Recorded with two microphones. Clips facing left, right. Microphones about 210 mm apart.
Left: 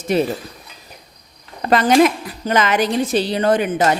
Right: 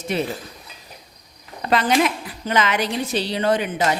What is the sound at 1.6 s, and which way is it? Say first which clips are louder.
A woman's voice: left 6 dB; 45° left (ahead or behind).